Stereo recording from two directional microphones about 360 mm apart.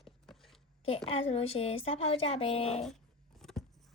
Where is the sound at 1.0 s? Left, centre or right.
Centre.